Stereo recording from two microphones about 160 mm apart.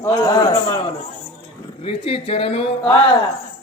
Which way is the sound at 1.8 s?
35° left (ahead or behind).